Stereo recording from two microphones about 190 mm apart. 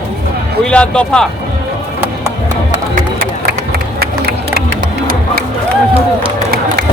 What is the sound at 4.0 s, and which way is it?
Crowd, 55° right (ahead or behind).